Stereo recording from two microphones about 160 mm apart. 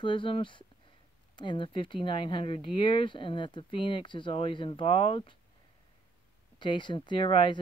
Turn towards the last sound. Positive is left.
turn(degrees=30)  # may be behind; listen again after turning